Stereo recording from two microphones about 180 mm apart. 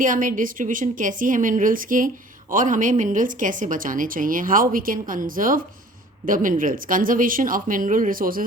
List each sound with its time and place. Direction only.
0.0 s speech: 45° right (ahead or behind)